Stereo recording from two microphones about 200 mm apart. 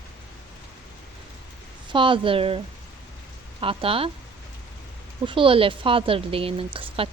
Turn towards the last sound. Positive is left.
turn(degrees=-25)  # may be behind; listen again after turning